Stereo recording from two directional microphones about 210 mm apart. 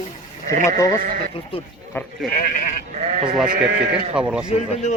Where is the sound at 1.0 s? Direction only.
40° right (ahead or behind).